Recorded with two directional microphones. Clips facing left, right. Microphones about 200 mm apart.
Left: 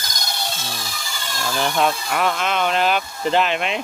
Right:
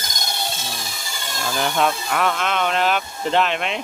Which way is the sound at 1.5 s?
Centre (ahead or behind).